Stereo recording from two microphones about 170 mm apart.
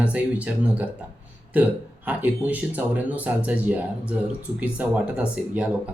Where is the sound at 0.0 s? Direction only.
10° right (ahead or behind).